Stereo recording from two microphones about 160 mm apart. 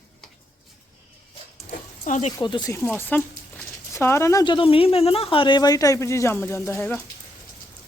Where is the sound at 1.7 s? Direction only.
50° left (ahead or behind).